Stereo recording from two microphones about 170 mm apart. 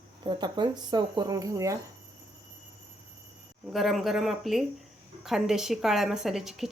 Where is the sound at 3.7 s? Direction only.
Centre (ahead or behind).